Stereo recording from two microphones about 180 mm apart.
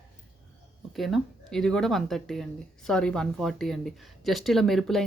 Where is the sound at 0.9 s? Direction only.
Centre (ahead or behind).